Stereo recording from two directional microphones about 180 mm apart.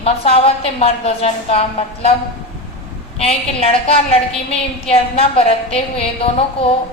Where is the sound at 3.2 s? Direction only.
35° left (ahead or behind).